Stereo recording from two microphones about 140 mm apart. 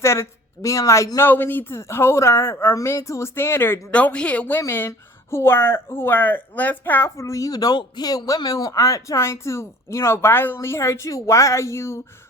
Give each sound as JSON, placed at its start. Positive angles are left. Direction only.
{"t": 0.0, "sound": "speech", "side_deg": 20}